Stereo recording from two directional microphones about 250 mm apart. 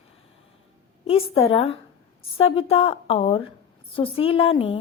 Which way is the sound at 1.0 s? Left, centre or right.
Left.